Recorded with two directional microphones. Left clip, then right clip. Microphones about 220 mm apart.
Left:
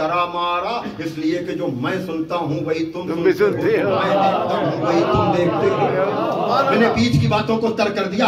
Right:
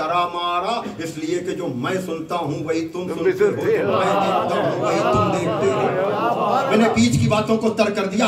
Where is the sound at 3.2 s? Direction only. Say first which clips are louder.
Left 2 dB; 40° left (ahead or behind).